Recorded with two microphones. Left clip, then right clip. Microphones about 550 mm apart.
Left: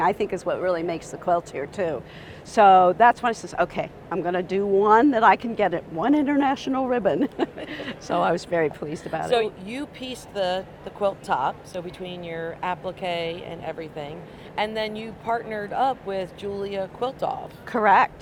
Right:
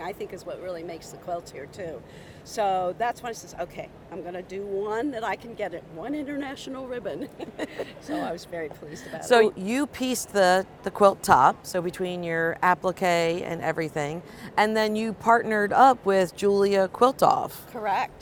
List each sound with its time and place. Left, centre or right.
0.0 s a man's voice: left
7.3 s a man's voice: left
9.2 s speech: right
17.7 s speech: left